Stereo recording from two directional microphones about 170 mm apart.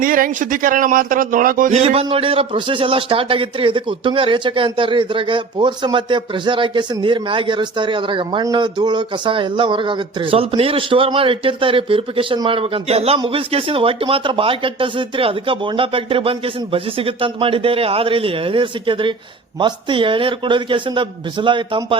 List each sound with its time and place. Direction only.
0.0 s speech: 55° right (ahead or behind)
1.7 s a man's voice: 35° right (ahead or behind)